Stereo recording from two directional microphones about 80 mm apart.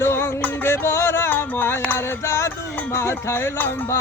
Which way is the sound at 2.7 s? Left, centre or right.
Left.